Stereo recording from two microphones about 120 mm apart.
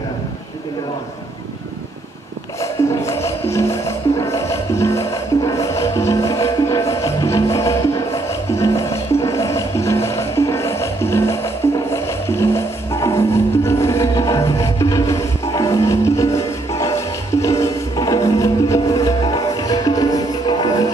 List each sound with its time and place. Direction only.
2.8 s music: 25° left (ahead or behind)